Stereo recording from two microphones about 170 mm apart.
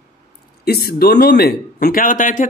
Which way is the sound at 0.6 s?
70° left (ahead or behind).